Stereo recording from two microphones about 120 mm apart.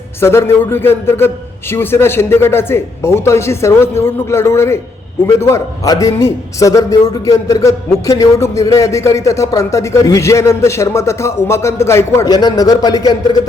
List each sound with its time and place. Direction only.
0.2 s a man's voice: 20° left (ahead or behind)